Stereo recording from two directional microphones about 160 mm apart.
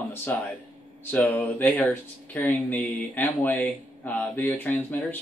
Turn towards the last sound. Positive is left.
turn(degrees=10)  # may be behind; listen again after turning